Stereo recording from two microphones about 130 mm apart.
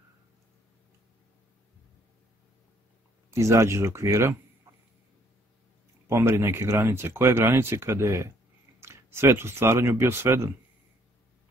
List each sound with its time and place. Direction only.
3.3 s speech: 20° right (ahead or behind)
4.7 s a sound: 20° right (ahead or behind)
6.0 s speech: 20° right (ahead or behind)